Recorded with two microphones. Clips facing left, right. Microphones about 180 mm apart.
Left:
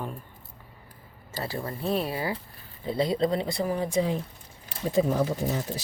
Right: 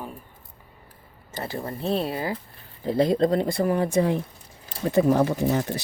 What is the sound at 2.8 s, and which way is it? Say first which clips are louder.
Speech: right 5 dB; 50° right (ahead or behind).